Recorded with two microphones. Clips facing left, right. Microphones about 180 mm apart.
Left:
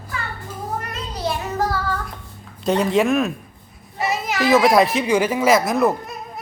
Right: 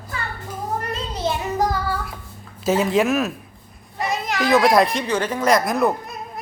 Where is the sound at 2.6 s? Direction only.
5° right (ahead or behind).